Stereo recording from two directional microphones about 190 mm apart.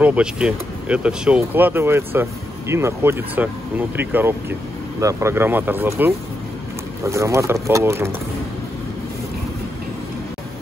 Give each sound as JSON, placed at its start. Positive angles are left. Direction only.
{"t": 0.0, "sound": "speech", "side_deg": -5}